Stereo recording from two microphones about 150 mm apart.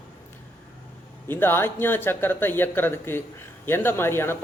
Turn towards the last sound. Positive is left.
turn(degrees=15)  # may be behind; listen again after turning